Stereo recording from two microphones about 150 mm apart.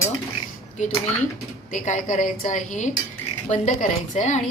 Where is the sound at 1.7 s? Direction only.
55° left (ahead or behind).